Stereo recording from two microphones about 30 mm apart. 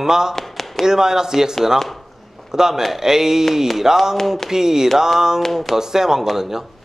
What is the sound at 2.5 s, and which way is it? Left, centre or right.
A man's voice, centre.